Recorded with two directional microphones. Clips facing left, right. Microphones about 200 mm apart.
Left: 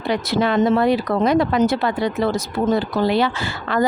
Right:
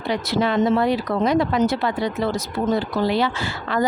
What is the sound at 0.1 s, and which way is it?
Speech, 55° left (ahead or behind).